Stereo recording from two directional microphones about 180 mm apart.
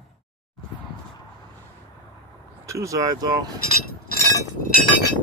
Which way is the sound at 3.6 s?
55° left (ahead or behind).